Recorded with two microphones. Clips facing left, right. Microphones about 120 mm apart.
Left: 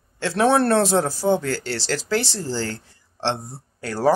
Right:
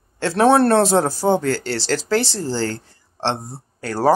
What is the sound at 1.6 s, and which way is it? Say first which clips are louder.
Speech: right 4 dB; 10° left (ahead or behind).